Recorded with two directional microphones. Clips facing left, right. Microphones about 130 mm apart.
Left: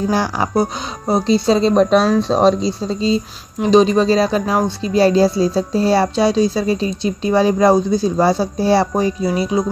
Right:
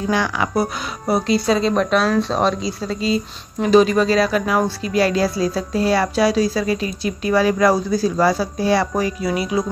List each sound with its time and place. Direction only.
0.1 s speech: 35° left (ahead or behind)
0.6 s speech: 25° left (ahead or behind)